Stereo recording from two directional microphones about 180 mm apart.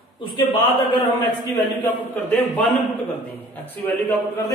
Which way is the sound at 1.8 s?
10° left (ahead or behind).